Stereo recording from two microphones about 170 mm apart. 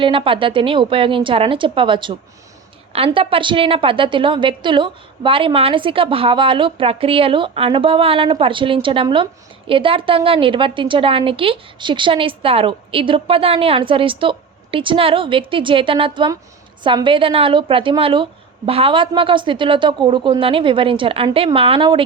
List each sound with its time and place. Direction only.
0.0 s a woman's voice: 30° right (ahead or behind)